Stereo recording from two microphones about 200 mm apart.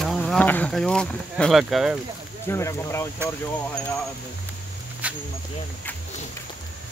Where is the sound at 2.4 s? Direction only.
15° left (ahead or behind).